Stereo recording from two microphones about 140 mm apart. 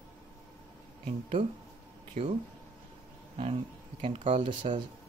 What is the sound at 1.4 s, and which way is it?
Speech, 35° right (ahead or behind).